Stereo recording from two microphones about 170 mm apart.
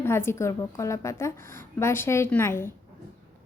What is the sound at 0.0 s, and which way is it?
A woman's voice, 15° left (ahead or behind).